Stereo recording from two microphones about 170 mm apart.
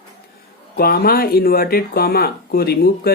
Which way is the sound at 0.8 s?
65° left (ahead or behind).